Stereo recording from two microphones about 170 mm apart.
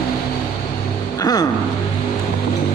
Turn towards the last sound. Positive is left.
turn(degrees=20)  # may be behind; listen again after turning